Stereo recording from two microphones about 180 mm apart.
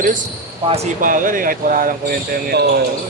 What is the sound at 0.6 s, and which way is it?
Speech, 35° right (ahead or behind).